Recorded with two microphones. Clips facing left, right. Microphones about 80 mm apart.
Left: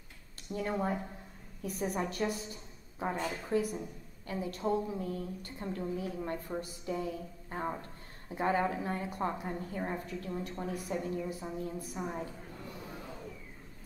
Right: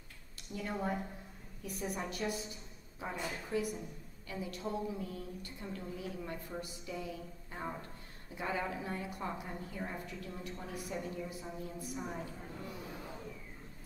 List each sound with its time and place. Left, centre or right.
0.6 s a woman's voice: left